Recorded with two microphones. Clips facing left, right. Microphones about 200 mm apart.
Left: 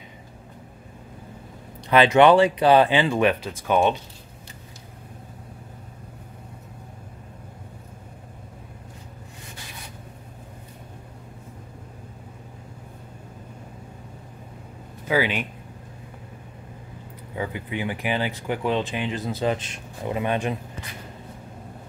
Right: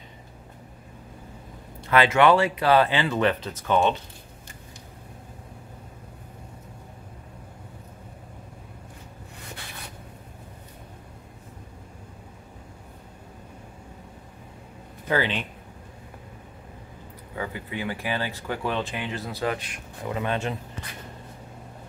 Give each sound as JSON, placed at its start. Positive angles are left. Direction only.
{"t": 1.9, "sound": "speech", "side_deg": 20}
{"t": 15.0, "sound": "speech", "side_deg": 10}
{"t": 17.4, "sound": "speech", "side_deg": 20}